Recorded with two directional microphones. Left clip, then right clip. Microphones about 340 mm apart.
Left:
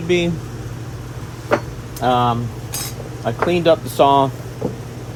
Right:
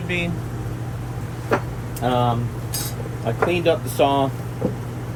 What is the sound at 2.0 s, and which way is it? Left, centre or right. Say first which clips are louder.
Speech: left 4 dB; left.